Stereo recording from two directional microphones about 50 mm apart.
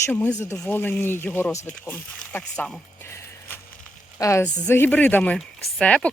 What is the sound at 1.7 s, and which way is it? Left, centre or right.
Speech, left.